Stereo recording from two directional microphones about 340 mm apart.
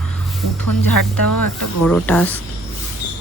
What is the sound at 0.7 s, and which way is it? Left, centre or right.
Speech, left.